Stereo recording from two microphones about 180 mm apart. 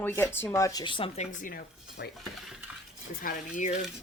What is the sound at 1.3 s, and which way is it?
Speech, 50° left (ahead or behind).